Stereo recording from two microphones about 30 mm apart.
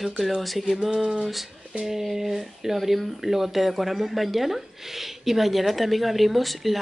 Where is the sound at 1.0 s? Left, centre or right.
Right.